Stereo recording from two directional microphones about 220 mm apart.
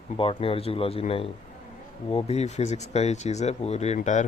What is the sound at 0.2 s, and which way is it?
Speech, 25° left (ahead or behind).